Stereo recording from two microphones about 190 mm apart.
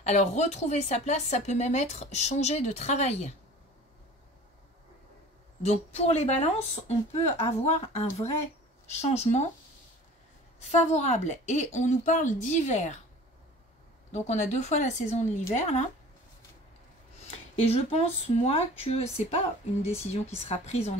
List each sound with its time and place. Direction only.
0.0 s speech: 35° left (ahead or behind)
5.6 s speech: 35° left (ahead or behind)
10.7 s speech: 35° left (ahead or behind)
14.1 s speech: 35° left (ahead or behind)
17.3 s speech: 35° left (ahead or behind)